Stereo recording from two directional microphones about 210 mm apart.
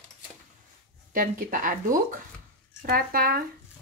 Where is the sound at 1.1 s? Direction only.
40° right (ahead or behind).